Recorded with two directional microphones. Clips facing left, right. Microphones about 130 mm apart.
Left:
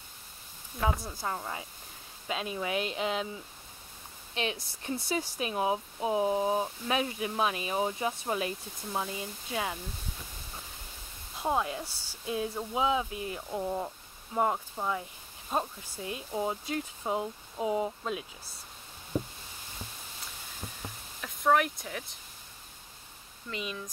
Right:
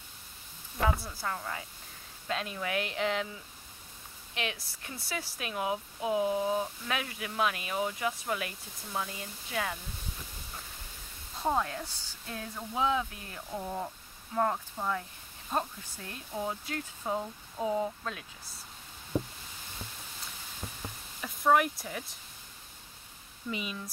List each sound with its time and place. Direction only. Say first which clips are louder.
1.0 s speech: left 1 dB; 20° left (ahead or behind)
4.4 s speech: left 3 dB; 25° left (ahead or behind)
11.4 s speech: even; 10° left (ahead or behind)
21.2 s speech: even; centre (ahead or behind)
23.5 s speech: even; 5° right (ahead or behind)